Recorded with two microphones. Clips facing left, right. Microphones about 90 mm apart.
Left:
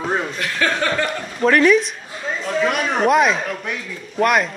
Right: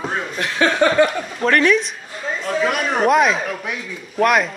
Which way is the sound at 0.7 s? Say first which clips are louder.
Right 6 dB; 10° right (ahead or behind).